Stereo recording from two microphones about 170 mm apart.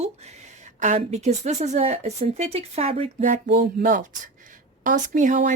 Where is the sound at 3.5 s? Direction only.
55° right (ahead or behind).